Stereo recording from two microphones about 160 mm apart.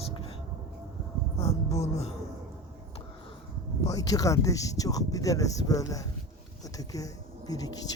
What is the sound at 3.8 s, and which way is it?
Speech, 20° left (ahead or behind).